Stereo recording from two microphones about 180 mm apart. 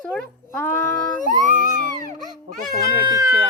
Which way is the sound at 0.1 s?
10° left (ahead or behind).